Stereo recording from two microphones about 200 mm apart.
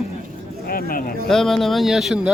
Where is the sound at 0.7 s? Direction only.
45° left (ahead or behind).